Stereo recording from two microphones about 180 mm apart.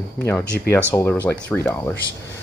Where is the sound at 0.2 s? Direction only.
10° left (ahead or behind).